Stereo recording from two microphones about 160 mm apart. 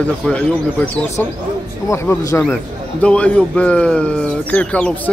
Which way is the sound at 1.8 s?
15° left (ahead or behind).